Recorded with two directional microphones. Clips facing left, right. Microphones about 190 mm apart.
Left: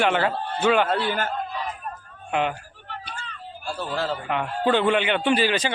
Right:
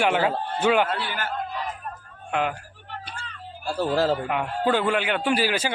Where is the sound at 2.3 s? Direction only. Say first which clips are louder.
Left 1 dB; 5° right (ahead or behind).